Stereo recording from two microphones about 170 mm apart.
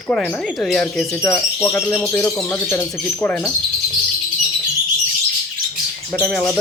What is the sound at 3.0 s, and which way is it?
Speech, centre (ahead or behind).